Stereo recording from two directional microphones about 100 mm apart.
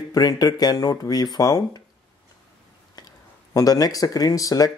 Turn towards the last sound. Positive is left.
turn(degrees=35)  # may be behind; listen again after turning